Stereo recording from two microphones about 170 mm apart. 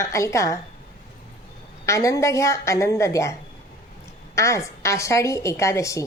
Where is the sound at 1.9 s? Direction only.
20° left (ahead or behind).